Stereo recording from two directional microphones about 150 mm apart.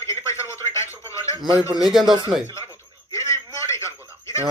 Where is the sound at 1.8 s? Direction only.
Centre (ahead or behind).